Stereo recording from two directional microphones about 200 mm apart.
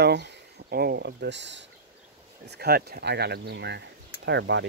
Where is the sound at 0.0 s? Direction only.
60° right (ahead or behind).